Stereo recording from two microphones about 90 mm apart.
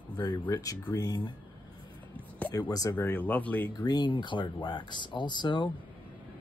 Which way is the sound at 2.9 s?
20° left (ahead or behind).